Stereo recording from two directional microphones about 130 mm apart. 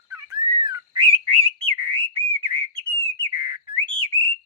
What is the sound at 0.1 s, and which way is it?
Bird, 30° right (ahead or behind).